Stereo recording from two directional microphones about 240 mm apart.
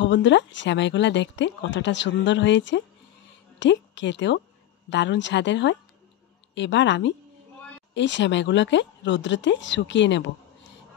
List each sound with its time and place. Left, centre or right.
0.0 s speech: left